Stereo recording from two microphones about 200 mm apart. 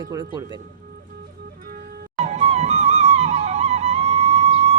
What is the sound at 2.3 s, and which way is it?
Music, 35° right (ahead or behind).